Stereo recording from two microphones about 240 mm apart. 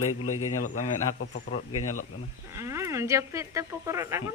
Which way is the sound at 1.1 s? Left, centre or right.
Left.